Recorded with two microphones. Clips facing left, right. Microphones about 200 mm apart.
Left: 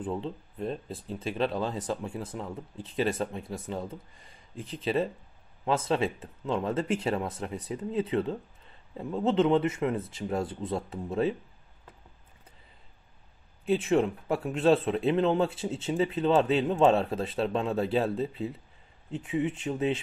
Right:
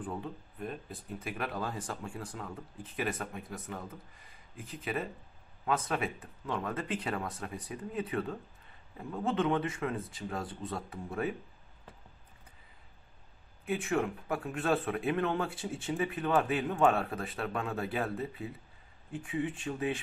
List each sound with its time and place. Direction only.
0.0 s a man's voice: 25° left (ahead or behind)
13.7 s a man's voice: 25° left (ahead or behind)